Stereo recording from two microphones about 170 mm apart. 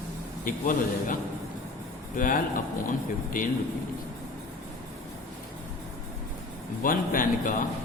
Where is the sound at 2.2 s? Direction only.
50° left (ahead or behind).